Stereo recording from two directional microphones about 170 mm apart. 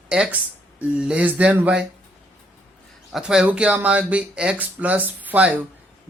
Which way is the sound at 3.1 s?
5° right (ahead or behind).